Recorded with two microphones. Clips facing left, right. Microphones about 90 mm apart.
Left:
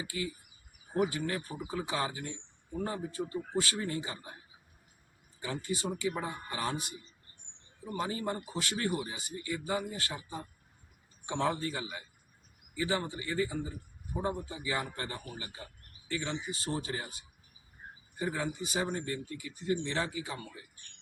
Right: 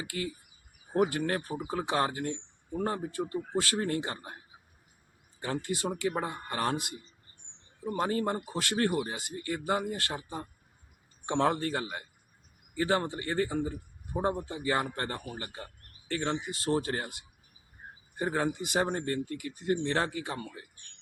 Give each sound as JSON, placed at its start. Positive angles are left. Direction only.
{"t": 0.0, "sound": "speech", "side_deg": -55}
{"t": 5.4, "sound": "speech", "side_deg": -55}